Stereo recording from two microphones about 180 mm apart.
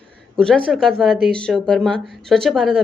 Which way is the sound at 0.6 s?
Centre (ahead or behind).